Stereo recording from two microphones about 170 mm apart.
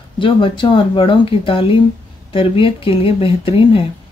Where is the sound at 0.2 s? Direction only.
30° left (ahead or behind).